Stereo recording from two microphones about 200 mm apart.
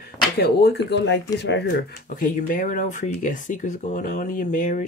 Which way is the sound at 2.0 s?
40° left (ahead or behind).